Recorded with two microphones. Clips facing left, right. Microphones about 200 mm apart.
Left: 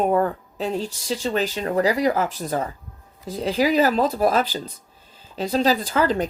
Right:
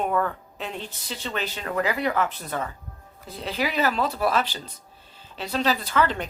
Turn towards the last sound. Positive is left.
turn(degrees=40)  # may be behind; listen again after turning